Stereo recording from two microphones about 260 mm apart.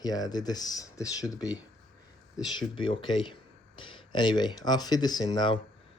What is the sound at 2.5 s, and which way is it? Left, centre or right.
Speech, centre.